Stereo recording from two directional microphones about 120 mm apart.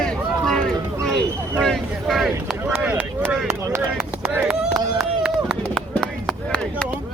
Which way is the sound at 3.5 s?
20° right (ahead or behind).